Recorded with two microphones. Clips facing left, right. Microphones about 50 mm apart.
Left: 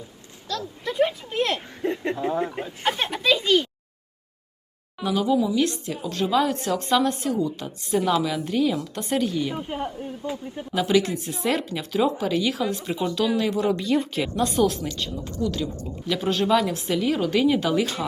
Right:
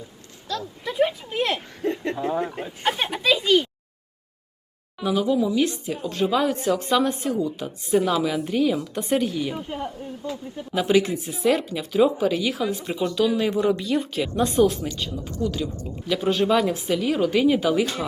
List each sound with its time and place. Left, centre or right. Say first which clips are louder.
0.4 s a sound: even; centre
1.8 s a sound: even; left
2.3 s speech: even; centre
4.9 s a woman's voice: even; centre
9.6 s speech: left 1 dB; centre
11.1 s speech: right 3 dB; centre
14.3 s a woman's voice: right 3 dB; centre